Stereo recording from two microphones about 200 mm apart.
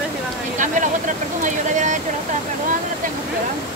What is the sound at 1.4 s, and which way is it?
Speech, 40° right (ahead or behind).